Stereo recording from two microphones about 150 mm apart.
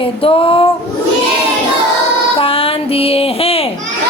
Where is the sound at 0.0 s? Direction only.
35° left (ahead or behind).